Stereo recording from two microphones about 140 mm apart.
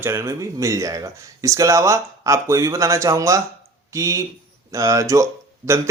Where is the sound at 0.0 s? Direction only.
20° right (ahead or behind).